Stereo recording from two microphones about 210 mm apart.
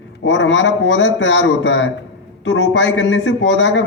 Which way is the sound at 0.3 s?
60° left (ahead or behind).